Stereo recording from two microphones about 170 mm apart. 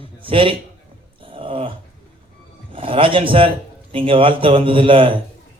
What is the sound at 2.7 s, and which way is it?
Speech, 30° right (ahead or behind).